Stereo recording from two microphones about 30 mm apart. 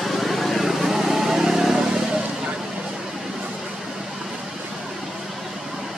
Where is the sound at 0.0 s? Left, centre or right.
Centre; by 2.5 s right.